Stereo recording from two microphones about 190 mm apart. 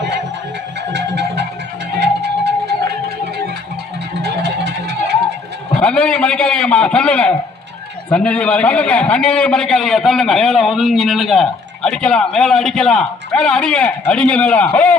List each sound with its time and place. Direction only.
0.9 s music: 65° right (ahead or behind)
4.1 s music: 60° right (ahead or behind)
5.8 s a man's voice: 5° left (ahead or behind)